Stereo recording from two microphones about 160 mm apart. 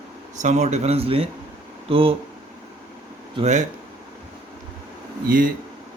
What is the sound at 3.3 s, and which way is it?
Speech, 45° right (ahead or behind).